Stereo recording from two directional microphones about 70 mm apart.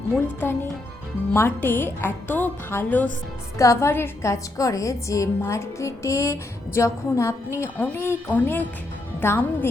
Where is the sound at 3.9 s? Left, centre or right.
Left.